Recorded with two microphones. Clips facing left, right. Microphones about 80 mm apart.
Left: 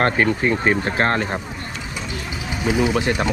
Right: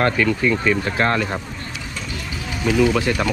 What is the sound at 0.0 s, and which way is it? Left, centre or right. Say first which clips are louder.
Speech: even; left.